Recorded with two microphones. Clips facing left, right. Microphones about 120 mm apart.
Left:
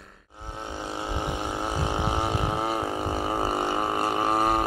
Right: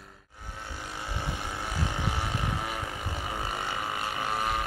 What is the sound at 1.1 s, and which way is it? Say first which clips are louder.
Vehicle: left 5 dB; 20° left (ahead or behind).